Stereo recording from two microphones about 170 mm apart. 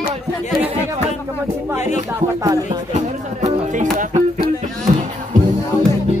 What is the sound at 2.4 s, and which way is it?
Speech, 20° right (ahead or behind).